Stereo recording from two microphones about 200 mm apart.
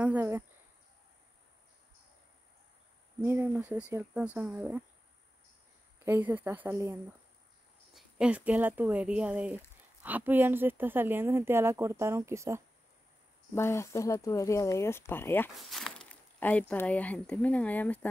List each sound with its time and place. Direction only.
0.0 s speech: 10° right (ahead or behind)
3.2 s speech: 10° right (ahead or behind)
6.0 s speech: 10° right (ahead or behind)
13.6 s speech: 15° left (ahead or behind)